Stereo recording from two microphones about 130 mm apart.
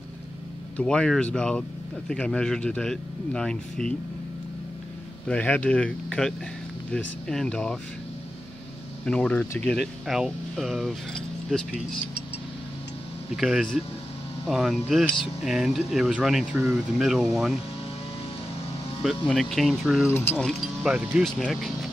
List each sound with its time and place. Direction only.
0.7 s speech: 5° left (ahead or behind)
5.3 s speech: 10° left (ahead or behind)
9.0 s speech: 5° left (ahead or behind)
13.4 s speech: centre (ahead or behind)
19.0 s speech: centre (ahead or behind)
20.1 s speech: 15° left (ahead or behind)
20.8 s speech: 5° right (ahead or behind)